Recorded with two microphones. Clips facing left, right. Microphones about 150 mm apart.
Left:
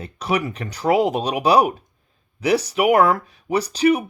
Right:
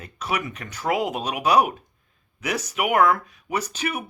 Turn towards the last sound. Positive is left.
turn(degrees=35)  # may be behind; listen again after turning